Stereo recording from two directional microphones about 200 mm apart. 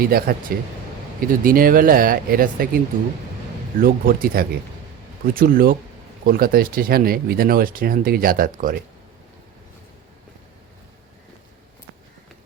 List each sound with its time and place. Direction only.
0.0 s speech: 50° right (ahead or behind)